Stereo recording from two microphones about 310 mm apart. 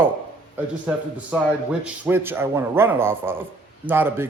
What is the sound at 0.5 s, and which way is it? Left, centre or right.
A man's voice, centre.